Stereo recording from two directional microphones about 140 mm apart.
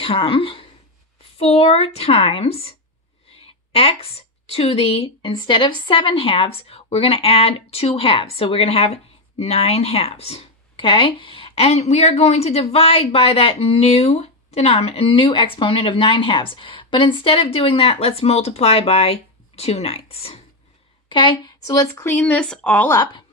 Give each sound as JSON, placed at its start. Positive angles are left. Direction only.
{"t": 0.0, "sound": "a woman's voice", "side_deg": 40}